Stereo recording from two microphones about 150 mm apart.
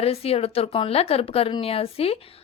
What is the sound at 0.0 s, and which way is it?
A woman's voice, 40° left (ahead or behind).